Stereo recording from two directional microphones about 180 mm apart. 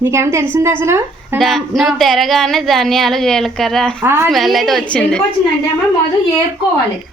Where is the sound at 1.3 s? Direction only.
Centre (ahead or behind).